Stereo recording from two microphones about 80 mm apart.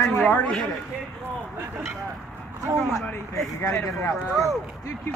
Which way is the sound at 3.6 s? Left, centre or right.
Left.